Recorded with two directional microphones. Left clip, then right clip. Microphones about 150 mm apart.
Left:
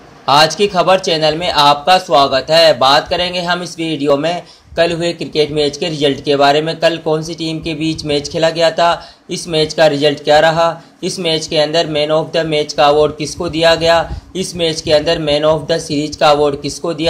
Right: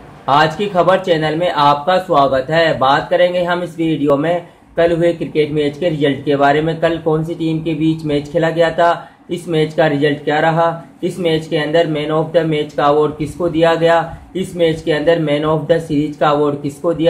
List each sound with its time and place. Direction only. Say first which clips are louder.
0.3 s speech: left 3 dB; 20° left (ahead or behind)